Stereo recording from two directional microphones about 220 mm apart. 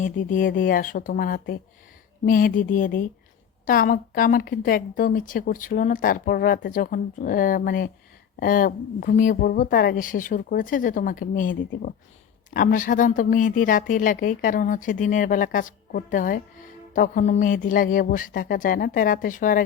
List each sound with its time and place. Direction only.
0.0 s speech: 35° left (ahead or behind)